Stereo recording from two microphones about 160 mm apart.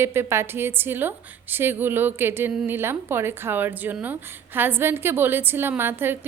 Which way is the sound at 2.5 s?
5° right (ahead or behind).